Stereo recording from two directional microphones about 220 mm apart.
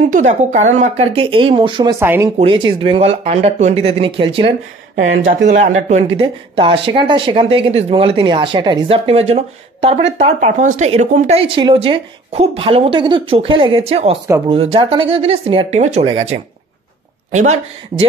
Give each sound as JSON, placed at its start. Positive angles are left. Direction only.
{"t": 0.1, "sound": "speech", "side_deg": -35}
{"t": 2.0, "sound": "speech", "side_deg": -10}
{"t": 2.3, "sound": "speech", "side_deg": -25}
{"t": 5.0, "sound": "speech", "side_deg": -40}